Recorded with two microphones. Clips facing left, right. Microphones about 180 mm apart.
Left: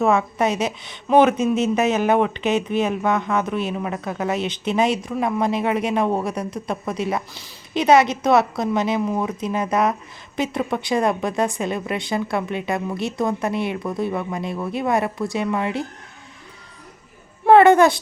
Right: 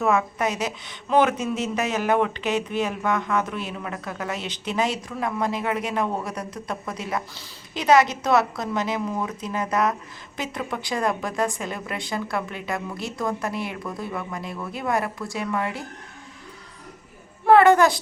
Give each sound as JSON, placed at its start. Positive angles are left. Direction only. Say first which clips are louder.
{"t": 0.0, "sound": "a woman's voice", "louder": "left 4 dB", "side_deg": 25}
{"t": 17.4, "sound": "a woman's voice", "louder": "left 3 dB", "side_deg": 20}